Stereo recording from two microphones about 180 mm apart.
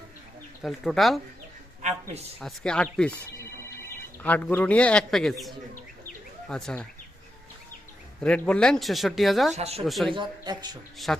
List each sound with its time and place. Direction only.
0.6 s speech: centre (ahead or behind)
2.4 s speech: 5° left (ahead or behind)
4.2 s a man's voice: 10° left (ahead or behind)
8.2 s speech: 5° left (ahead or behind)
9.6 s speech: 35° right (ahead or behind)
9.8 s speech: centre (ahead or behind)
10.2 s speech: 25° right (ahead or behind)
10.9 s speech: centre (ahead or behind)